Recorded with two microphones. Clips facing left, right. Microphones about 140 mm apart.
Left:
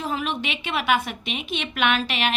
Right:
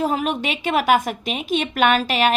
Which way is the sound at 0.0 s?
40° right (ahead or behind).